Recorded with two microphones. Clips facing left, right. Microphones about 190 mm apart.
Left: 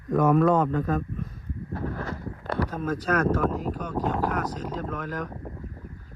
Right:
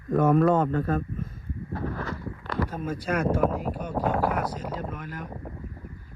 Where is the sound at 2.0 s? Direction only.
40° left (ahead or behind).